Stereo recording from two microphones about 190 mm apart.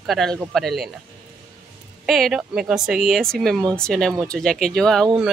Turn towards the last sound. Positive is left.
turn(degrees=0)  # may be behind; listen again after turning